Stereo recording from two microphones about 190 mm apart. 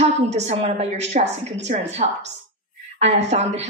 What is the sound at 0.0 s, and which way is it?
Speech, 35° right (ahead or behind).